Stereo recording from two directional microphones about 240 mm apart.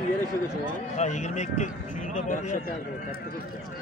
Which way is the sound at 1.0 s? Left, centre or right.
Left.